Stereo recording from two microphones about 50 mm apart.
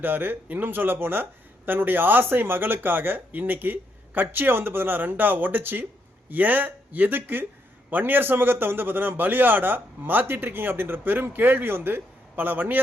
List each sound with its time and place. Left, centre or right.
0.0 s a man's voice: right